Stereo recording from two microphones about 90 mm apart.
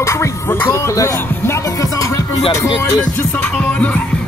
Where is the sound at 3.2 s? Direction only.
15° left (ahead or behind).